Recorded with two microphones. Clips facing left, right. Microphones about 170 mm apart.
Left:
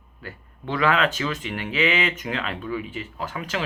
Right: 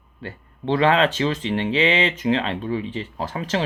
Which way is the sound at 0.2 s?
30° right (ahead or behind).